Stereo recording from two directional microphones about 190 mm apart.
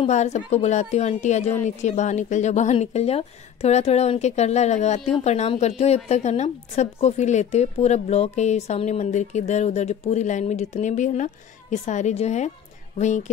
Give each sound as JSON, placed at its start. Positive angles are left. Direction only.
{"t": 0.0, "sound": "a woman's voice", "side_deg": 35}